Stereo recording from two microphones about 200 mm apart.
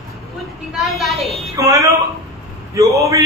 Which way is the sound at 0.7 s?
Centre (ahead or behind).